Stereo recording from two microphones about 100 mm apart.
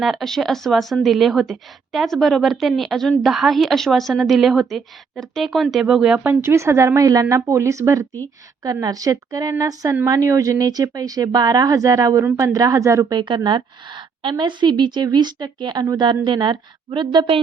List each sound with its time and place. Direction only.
0.0 s a woman's voice: centre (ahead or behind)
6.2 s a woman's voice: 25° right (ahead or behind)
13.1 s a woman's voice: 50° right (ahead or behind)